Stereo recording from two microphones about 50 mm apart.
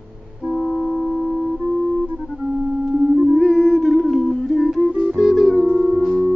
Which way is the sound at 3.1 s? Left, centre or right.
Centre.